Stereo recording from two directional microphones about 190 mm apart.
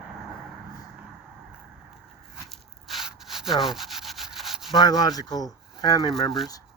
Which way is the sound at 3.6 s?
Centre (ahead or behind).